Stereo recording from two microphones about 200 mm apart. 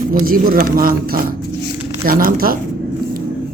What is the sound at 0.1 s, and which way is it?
Speech, 45° right (ahead or behind).